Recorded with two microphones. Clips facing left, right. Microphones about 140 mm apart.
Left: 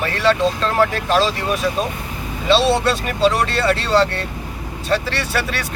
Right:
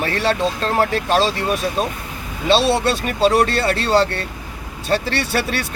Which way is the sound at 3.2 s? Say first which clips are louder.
Right 1 dB; 35° right (ahead or behind).